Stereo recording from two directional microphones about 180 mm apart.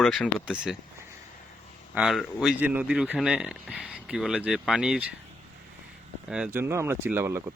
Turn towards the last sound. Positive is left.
turn(degrees=-15)  # may be behind; listen again after turning